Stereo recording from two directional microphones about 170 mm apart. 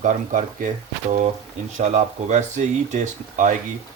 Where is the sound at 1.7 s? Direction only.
45° right (ahead or behind).